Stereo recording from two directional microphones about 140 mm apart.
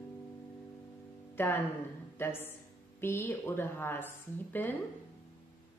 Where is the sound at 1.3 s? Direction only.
15° left (ahead or behind).